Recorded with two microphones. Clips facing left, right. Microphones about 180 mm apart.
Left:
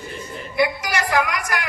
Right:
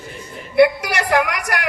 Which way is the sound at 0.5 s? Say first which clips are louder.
Right 7 dB; 65° right (ahead or behind).